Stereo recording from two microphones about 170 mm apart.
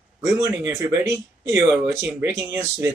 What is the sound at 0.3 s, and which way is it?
Speech, 15° right (ahead or behind).